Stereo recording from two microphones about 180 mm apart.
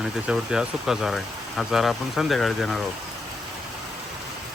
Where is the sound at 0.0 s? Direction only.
5° right (ahead or behind).